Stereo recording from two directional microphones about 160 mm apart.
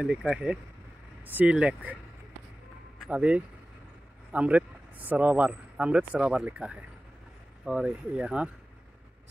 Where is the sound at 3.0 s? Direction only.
5° right (ahead or behind).